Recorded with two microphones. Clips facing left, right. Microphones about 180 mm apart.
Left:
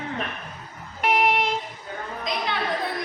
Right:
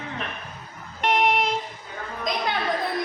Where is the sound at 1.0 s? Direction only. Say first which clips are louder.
Even; 5° left (ahead or behind).